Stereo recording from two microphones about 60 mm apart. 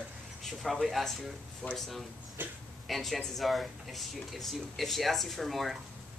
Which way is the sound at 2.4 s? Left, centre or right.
Right.